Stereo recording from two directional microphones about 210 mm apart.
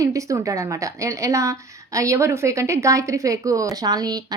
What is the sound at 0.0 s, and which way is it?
A woman's voice, 15° right (ahead or behind).